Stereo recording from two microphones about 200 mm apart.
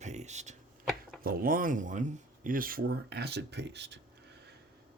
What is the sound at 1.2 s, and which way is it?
Speech, 45° right (ahead or behind).